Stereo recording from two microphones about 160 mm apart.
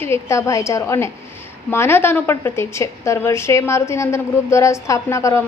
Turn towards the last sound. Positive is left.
turn(degrees=20)  # may be behind; listen again after turning